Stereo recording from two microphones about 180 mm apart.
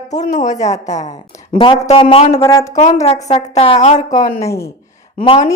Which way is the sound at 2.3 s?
20° left (ahead or behind).